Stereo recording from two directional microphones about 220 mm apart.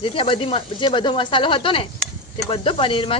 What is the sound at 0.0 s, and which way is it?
Speech, 25° left (ahead or behind).